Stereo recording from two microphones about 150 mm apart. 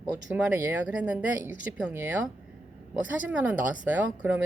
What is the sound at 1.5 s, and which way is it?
Speech, 60° left (ahead or behind).